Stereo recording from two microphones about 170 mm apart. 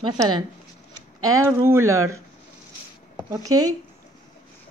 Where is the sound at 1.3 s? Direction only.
15° right (ahead or behind).